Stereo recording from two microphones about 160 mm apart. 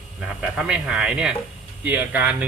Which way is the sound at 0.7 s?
5° right (ahead or behind).